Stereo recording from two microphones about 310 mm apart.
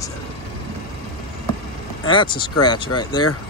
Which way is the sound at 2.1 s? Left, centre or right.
Centre.